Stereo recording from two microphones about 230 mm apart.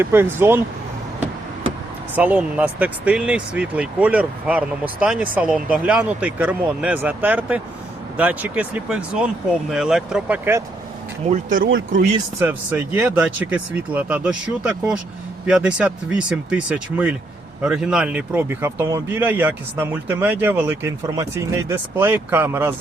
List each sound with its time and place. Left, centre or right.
0.0 s speech: centre
2.1 s speech: centre
11.3 s speech: right
12.4 s speech: centre